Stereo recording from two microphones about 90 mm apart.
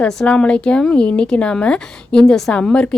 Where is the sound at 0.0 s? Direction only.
10° left (ahead or behind).